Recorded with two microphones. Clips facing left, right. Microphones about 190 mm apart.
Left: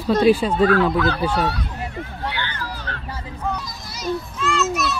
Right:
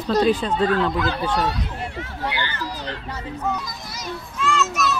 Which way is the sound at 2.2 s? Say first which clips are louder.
Right 3 dB; 10° right (ahead or behind).